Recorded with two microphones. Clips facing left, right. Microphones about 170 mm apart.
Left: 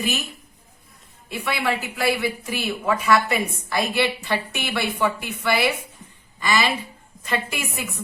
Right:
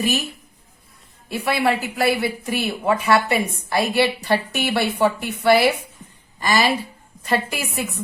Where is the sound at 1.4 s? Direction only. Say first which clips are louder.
Right 4 dB; 40° right (ahead or behind).